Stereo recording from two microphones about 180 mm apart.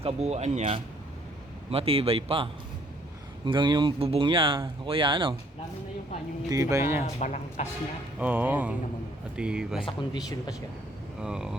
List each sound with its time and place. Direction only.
0.0 s speech: 35° right (ahead or behind)
6.5 s speech: 20° right (ahead or behind)
7.2 s speech: 40° left (ahead or behind)
8.2 s speech: 10° right (ahead or behind)
9.8 s speech: 20° left (ahead or behind)
11.2 s speech: 5° right (ahead or behind)